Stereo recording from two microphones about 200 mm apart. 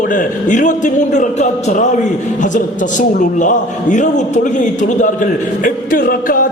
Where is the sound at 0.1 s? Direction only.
40° left (ahead or behind).